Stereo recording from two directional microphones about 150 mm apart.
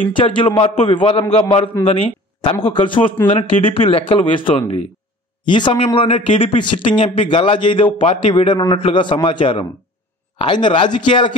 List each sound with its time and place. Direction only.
0.1 s a man's voice: 35° left (ahead or behind)
8.0 s a man's voice: 45° left (ahead or behind)
8.3 s a man's voice: 35° left (ahead or behind)